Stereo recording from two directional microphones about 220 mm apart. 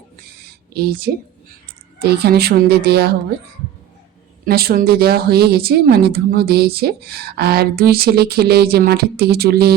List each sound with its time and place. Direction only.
0.7 s a woman's voice: 45° right (ahead or behind)
4.4 s a woman's voice: 45° right (ahead or behind)